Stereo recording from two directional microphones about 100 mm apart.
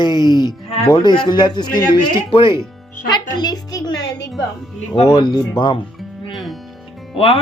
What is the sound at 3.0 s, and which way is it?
Music, 45° left (ahead or behind).